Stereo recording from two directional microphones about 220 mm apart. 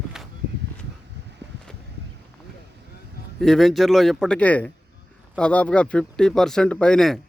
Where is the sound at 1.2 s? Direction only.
50° right (ahead or behind).